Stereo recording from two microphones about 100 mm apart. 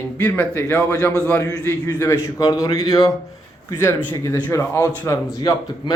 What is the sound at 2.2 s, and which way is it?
Speech, 35° left (ahead or behind).